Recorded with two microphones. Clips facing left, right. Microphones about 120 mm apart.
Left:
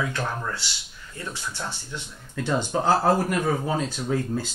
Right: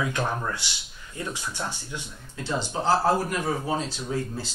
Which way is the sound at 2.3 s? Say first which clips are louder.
Left 4 dB; 50° left (ahead or behind).